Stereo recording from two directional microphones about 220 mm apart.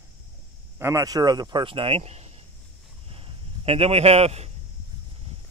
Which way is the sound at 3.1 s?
25° right (ahead or behind).